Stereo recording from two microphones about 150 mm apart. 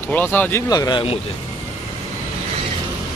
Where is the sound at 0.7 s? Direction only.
30° left (ahead or behind).